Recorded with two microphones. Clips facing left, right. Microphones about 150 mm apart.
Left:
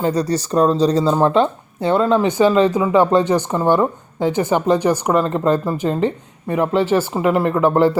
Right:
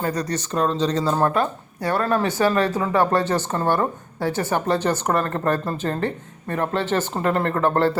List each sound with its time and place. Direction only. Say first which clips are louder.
0.0 s speech: left 6 dB; 30° left (ahead or behind)
1.0 s speech: left 5 dB; 20° left (ahead or behind)